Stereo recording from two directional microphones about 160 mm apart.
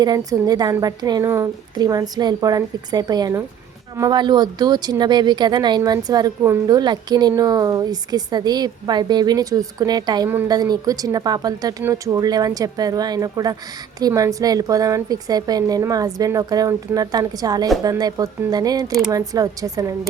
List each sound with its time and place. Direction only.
0.0 s speech: 25° right (ahead or behind)